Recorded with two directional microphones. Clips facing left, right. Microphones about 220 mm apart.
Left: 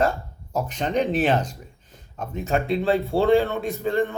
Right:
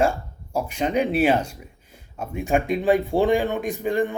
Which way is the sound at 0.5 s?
10° right (ahead or behind).